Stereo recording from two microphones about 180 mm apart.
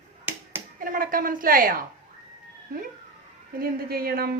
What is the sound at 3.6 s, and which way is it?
Speech, 55° right (ahead or behind).